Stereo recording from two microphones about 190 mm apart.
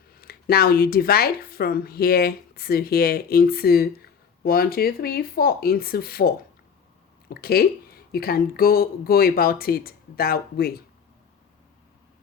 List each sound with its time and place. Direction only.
0.1 s speech: 55° left (ahead or behind)